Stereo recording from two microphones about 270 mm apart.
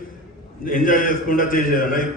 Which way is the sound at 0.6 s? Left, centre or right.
Left.